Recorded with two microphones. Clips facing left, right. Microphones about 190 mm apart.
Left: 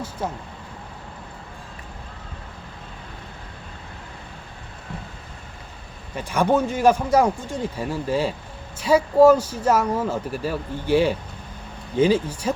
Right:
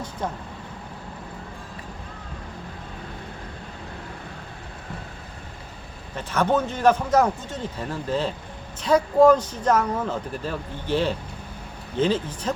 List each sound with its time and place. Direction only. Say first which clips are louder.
0.2 s speech: left 1 dB; 5° left (ahead or behind)
6.1 s speech: left 2 dB; 10° left (ahead or behind)